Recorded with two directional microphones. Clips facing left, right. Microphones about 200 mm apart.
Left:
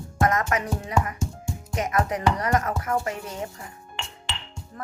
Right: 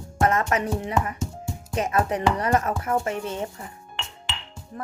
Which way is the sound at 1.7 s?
30° right (ahead or behind).